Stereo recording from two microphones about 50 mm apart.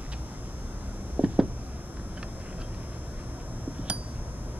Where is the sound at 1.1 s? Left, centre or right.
Right.